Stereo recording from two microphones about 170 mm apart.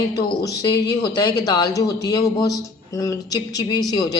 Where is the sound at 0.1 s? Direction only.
25° left (ahead or behind).